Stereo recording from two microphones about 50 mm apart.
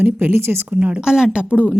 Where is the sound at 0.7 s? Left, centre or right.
Right.